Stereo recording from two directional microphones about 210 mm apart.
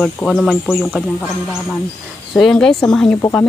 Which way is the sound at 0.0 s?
Centre (ahead or behind).